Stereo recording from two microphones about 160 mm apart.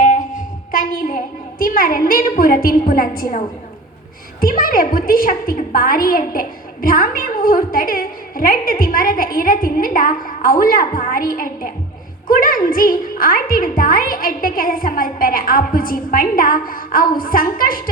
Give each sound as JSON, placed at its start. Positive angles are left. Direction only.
{"t": 0.0, "sound": "a woman's voice", "side_deg": 55}